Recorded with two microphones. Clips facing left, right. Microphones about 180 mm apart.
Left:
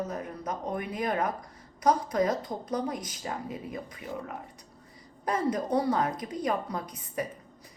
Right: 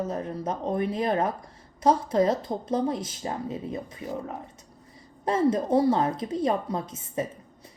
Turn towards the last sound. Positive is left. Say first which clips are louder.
# right 4 dB
turn(degrees=-25)  # may be behind; listen again after turning